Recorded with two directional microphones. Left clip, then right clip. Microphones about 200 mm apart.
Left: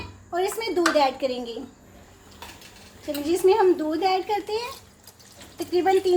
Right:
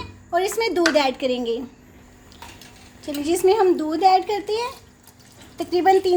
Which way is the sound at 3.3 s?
50° right (ahead or behind).